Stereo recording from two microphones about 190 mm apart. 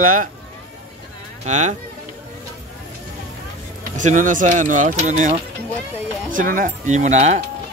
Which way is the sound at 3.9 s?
40° right (ahead or behind).